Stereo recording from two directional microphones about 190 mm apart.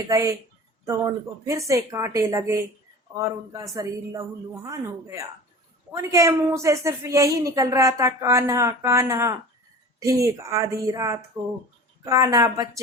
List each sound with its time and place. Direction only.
0.1 s a woman's voice: 15° right (ahead or behind)